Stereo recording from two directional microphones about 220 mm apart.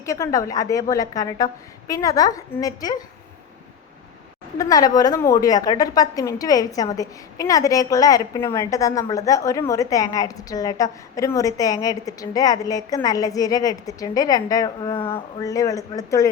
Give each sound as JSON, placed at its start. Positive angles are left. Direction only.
{"t": 0.0, "sound": "a woman's voice", "side_deg": 15}
{"t": 4.5, "sound": "a woman's voice", "side_deg": 15}